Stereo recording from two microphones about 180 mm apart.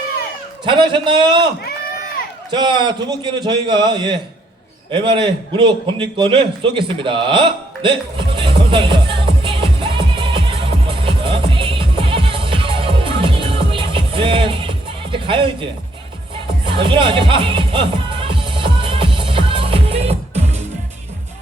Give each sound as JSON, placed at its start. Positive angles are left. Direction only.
{"t": 0.6, "sound": "a man's voice", "side_deg": -30}
{"t": 2.5, "sound": "a man's voice", "side_deg": -25}
{"t": 4.9, "sound": "a sound", "side_deg": -30}
{"t": 16.6, "sound": "music", "side_deg": -30}